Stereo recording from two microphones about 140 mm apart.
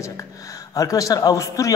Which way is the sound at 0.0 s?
25° left (ahead or behind).